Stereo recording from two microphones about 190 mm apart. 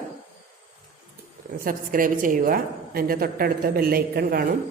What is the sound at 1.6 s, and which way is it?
A woman's voice, 45° right (ahead or behind).